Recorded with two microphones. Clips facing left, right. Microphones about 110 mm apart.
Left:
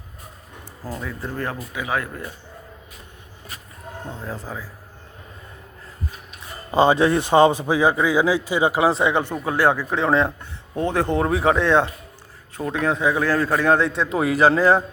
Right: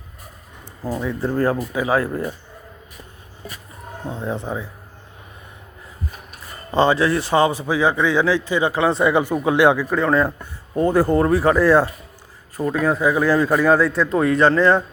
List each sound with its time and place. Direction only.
0.9 s speech: 25° right (ahead or behind)
4.2 s speech: 25° right (ahead or behind)
6.7 s speech: 15° left (ahead or behind)
8.9 s a man's voice: centre (ahead or behind)
9.2 s speech: 15° right (ahead or behind)
9.9 s a man's voice: centre (ahead or behind)